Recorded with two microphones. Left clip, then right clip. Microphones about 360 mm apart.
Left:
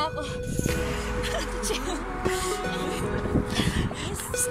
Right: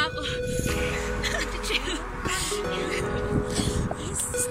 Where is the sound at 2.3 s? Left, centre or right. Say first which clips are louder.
Right 2 dB; centre.